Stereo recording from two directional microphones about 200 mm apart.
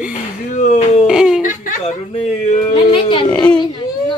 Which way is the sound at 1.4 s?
40° left (ahead or behind).